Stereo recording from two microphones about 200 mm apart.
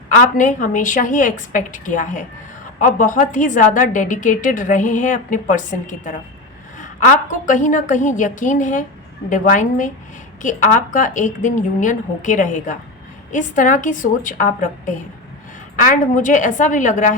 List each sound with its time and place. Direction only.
0.1 s a woman's voice: 40° left (ahead or behind)